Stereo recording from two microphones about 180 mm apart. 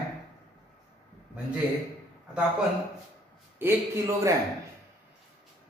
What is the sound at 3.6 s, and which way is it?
Speech, 15° right (ahead or behind).